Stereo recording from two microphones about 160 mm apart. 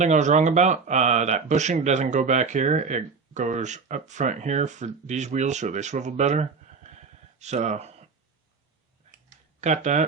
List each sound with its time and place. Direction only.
0.0 s speech: 50° right (ahead or behind)
9.6 s speech: 50° right (ahead or behind)